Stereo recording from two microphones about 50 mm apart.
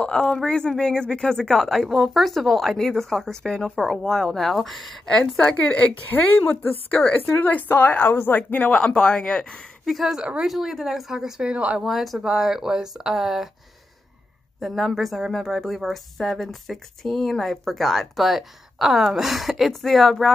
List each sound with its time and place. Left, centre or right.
0.0 s a woman's voice: centre
5.6 s a woman's voice: left
6.5 s a woman's voice: left
8.7 s a woman's voice: centre
9.8 s speech: centre
10.1 s speech: centre
10.4 s speech: centre
11.5 s speech: right
11.8 s speech: centre
14.6 s speech: centre